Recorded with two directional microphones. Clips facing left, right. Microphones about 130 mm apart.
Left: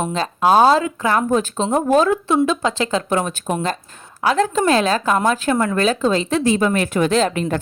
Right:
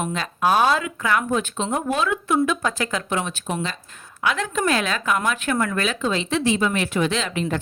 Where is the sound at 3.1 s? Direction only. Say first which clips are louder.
Left 5 dB; 45° left (ahead or behind).